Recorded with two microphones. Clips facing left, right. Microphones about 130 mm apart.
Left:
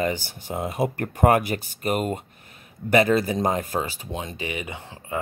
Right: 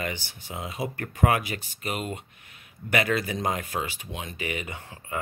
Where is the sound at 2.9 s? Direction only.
35° left (ahead or behind).